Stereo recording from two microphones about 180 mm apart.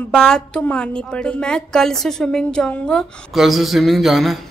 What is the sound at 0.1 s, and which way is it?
A woman's voice, 5° left (ahead or behind).